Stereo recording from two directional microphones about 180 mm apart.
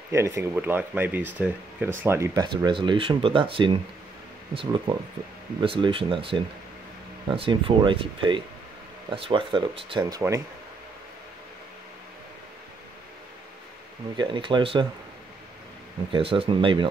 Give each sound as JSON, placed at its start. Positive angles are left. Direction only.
{"t": 0.1, "sound": "speech", "side_deg": -15}
{"t": 14.1, "sound": "speech", "side_deg": -25}
{"t": 16.1, "sound": "speech", "side_deg": -30}